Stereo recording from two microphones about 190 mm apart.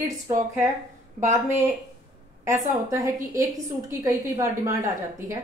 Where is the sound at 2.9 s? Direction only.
15° right (ahead or behind).